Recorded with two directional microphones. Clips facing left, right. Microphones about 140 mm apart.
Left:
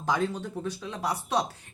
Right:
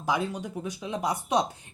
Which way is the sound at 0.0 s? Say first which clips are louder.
Left 1 dB; 10° right (ahead or behind).